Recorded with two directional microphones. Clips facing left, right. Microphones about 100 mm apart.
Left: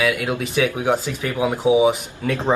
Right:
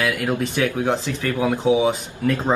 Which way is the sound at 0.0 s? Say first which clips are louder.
Left 1 dB; 5° left (ahead or behind).